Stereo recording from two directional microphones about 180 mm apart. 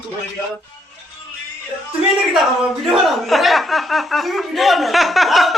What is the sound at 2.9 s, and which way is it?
Speech, centre (ahead or behind).